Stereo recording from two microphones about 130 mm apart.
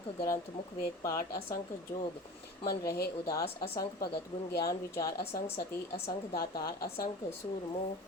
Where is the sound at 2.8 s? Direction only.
25° left (ahead or behind).